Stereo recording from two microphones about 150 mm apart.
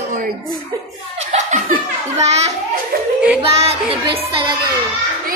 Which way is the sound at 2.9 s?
75° right (ahead or behind).